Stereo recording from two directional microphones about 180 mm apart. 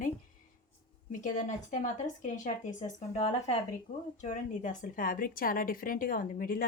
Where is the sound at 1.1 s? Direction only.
45° left (ahead or behind).